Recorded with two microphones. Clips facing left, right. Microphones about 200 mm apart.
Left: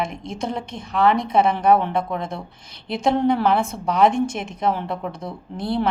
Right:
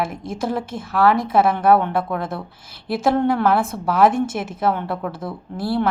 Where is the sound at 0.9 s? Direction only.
20° left (ahead or behind).